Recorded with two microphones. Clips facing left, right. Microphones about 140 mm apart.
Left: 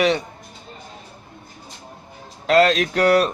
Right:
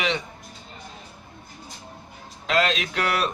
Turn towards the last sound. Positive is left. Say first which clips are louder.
# left 9 dB
turn(degrees=40)  # may be behind; listen again after turning